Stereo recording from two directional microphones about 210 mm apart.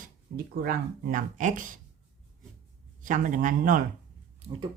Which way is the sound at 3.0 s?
40° right (ahead or behind).